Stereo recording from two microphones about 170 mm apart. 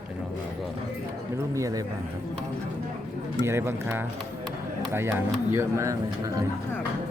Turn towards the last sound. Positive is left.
turn(degrees=-20)  # may be behind; listen again after turning